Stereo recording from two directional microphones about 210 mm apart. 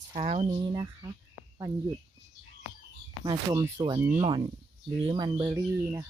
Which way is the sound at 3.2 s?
20° right (ahead or behind).